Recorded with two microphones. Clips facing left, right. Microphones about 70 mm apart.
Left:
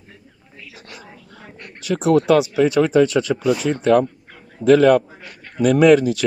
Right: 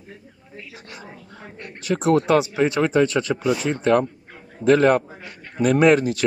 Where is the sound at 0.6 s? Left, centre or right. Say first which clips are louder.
Right 1 dB; right.